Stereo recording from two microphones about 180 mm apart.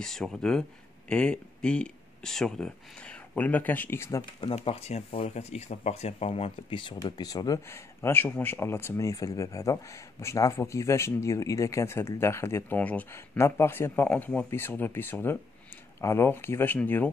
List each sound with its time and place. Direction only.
0.0 s speech: 5° left (ahead or behind)
4.4 s speech: 30° left (ahead or behind); by 17.1 s 10° left (ahead or behind)